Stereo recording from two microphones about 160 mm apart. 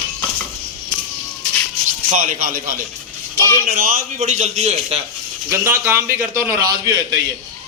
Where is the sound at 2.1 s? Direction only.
55° right (ahead or behind).